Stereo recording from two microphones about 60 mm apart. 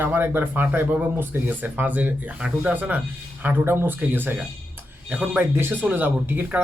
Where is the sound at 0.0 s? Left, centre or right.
Right.